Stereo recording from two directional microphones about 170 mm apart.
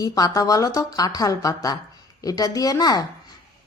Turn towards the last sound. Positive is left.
turn(degrees=20)  # may be behind; listen again after turning